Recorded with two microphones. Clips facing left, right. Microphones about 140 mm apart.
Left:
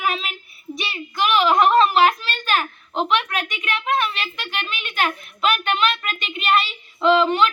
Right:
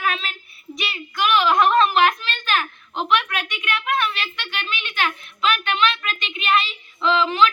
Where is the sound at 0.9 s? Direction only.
30° left (ahead or behind).